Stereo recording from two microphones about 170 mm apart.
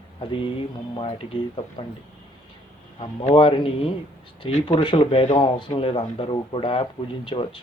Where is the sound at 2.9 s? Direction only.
35° left (ahead or behind).